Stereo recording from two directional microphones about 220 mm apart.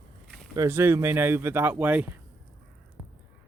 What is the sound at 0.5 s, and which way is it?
Speech, 10° right (ahead or behind).